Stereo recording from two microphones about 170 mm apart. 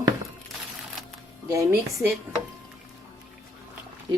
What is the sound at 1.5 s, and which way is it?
Speech, 15° right (ahead or behind).